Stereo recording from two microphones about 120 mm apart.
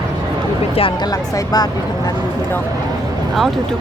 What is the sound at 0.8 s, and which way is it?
Speech, 45° left (ahead or behind).